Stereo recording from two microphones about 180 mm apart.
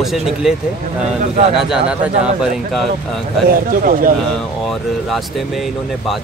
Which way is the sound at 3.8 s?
50° right (ahead or behind).